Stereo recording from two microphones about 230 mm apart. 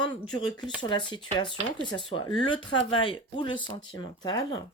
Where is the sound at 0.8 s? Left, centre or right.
Left.